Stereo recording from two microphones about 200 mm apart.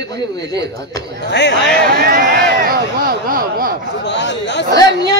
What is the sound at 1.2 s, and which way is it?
Speech, 60° left (ahead or behind).